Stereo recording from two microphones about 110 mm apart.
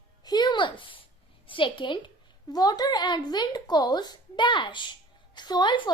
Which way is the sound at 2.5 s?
35° left (ahead or behind).